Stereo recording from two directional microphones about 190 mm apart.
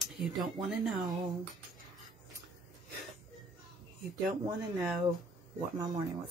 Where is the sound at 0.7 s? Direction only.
Centre (ahead or behind).